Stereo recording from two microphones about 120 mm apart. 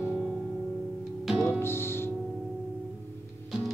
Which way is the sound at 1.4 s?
20° left (ahead or behind).